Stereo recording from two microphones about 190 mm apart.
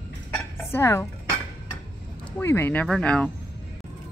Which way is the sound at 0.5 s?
15° left (ahead or behind).